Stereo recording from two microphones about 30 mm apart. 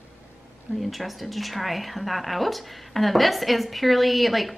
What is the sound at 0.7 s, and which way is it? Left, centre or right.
A woman's voice, centre.